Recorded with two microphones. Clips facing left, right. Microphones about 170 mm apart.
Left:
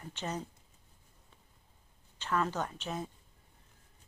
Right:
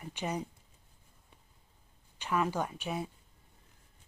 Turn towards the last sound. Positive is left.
turn(degrees=-10)  # may be behind; listen again after turning